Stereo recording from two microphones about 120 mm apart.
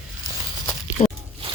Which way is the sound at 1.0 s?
45° left (ahead or behind).